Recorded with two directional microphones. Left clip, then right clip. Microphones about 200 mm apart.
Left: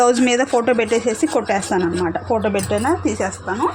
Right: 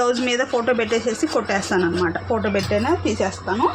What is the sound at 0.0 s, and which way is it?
Speech, 40° left (ahead or behind).